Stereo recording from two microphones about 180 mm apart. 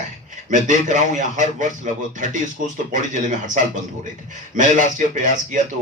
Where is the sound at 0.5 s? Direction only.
45° right (ahead or behind).